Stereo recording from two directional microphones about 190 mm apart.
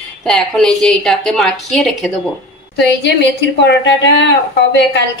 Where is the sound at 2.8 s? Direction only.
65° left (ahead or behind).